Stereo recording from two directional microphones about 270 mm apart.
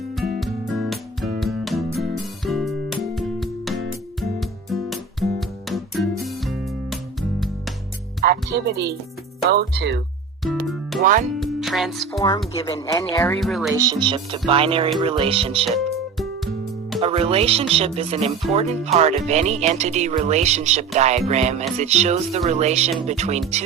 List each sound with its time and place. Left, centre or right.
0.3 s music: centre
8.2 s speech: right
10.4 s music: centre
11.0 s speech: right
11.3 s speech: centre
12.5 s speech: centre
13.7 s speech: centre
17.0 s speech: right